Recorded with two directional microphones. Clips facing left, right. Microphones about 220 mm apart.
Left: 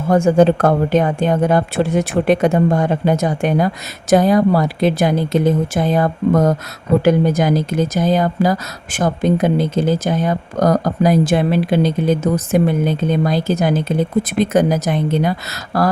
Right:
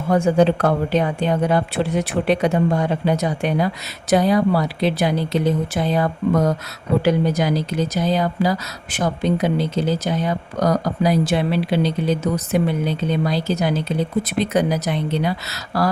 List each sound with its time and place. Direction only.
0.1 s speech: 45° left (ahead or behind)